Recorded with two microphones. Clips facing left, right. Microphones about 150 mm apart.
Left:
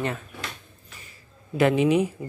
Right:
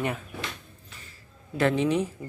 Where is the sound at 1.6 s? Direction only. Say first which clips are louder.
Left 4 dB; 10° left (ahead or behind).